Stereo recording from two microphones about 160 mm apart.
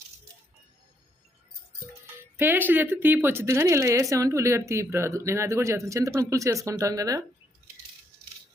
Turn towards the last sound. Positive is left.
turn(degrees=-20)  # may be behind; listen again after turning